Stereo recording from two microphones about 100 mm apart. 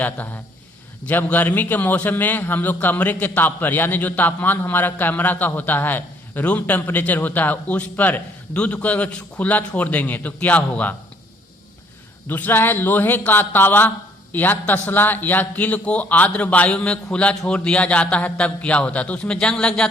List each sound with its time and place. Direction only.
0.0 s a man's voice: 15° left (ahead or behind)
12.3 s a man's voice: 20° left (ahead or behind)